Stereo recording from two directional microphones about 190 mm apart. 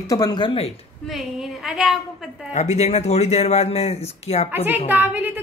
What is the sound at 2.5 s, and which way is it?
Speech, 35° left (ahead or behind).